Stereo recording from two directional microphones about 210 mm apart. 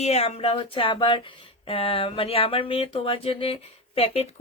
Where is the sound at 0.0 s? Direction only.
30° left (ahead or behind).